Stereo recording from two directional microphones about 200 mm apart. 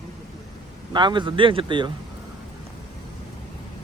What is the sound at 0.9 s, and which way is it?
Speech, 25° right (ahead or behind).